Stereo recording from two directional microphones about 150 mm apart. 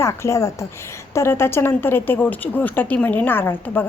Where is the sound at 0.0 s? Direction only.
20° left (ahead or behind).